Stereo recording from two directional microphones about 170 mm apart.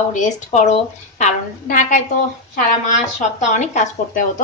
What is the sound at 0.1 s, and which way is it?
A woman's voice, 45° left (ahead or behind).